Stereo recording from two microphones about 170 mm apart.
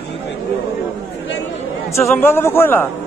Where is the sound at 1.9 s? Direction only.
15° left (ahead or behind).